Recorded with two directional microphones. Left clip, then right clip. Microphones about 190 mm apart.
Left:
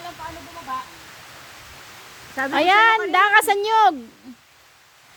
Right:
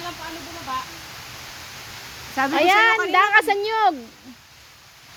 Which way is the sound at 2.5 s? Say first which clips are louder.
Left 1 dB; 25° left (ahead or behind).